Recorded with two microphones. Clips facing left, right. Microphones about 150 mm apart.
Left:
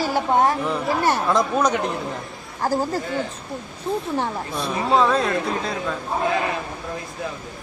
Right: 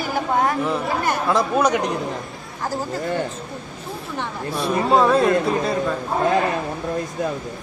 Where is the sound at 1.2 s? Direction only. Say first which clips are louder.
Right 1 dB; 10° right (ahead or behind).